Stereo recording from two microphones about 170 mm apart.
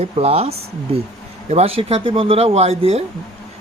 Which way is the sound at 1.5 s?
35° right (ahead or behind).